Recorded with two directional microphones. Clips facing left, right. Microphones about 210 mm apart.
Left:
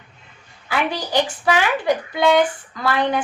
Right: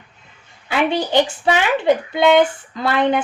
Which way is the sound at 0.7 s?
25° right (ahead or behind).